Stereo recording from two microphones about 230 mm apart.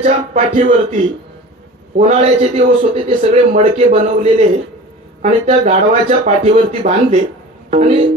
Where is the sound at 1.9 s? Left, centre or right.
Right.